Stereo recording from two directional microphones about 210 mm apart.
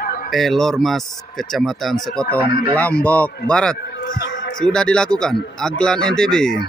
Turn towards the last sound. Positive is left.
turn(degrees=5)  # may be behind; listen again after turning